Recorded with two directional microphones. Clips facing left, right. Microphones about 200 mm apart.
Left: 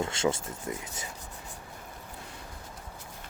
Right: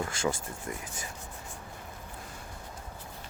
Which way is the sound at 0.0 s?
25° left (ahead or behind).